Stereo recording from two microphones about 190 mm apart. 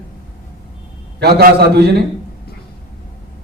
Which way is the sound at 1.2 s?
55° right (ahead or behind).